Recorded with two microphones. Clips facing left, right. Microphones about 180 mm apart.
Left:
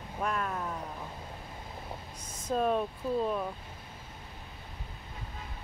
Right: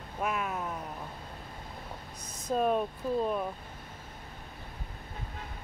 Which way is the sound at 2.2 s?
20° right (ahead or behind).